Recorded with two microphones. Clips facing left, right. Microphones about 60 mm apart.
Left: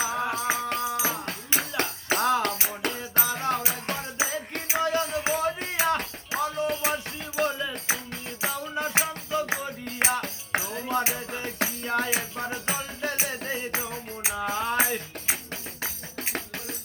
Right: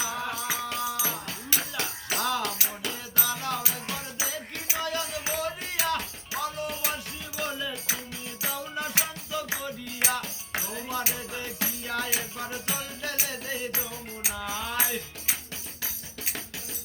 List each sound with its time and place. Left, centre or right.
0.0 s music: left
1.7 s music: left
11.9 s music: left